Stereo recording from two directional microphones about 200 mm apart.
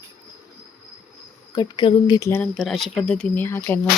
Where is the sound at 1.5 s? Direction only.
20° left (ahead or behind).